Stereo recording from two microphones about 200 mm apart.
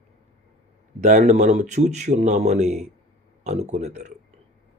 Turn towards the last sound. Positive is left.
turn(degrees=-35)  # may be behind; listen again after turning